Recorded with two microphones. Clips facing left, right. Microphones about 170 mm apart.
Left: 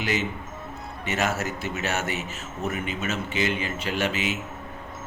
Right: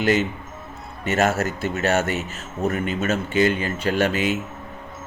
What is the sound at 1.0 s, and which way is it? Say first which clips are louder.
Speech: right 6 dB; 50° right (ahead or behind).